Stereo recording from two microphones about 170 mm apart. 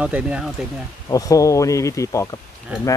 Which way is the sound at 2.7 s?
10° right (ahead or behind).